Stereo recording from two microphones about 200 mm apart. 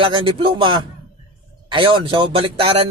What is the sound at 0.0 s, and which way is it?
Speech, 25° right (ahead or behind).